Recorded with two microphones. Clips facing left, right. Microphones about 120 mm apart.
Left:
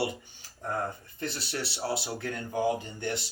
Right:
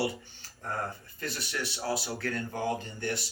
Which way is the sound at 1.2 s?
30° left (ahead or behind).